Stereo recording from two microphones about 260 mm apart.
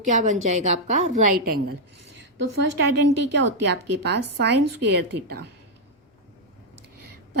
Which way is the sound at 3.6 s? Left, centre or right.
Right.